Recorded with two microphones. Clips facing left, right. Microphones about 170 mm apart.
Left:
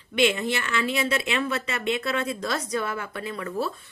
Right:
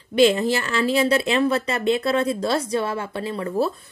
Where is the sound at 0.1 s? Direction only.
35° right (ahead or behind).